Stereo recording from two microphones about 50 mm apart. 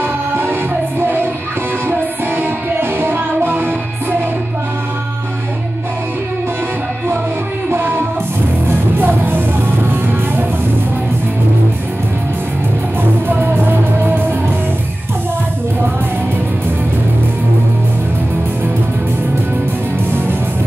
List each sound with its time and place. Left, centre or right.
0.0 s music: right
7.7 s music: right
13.4 s music: right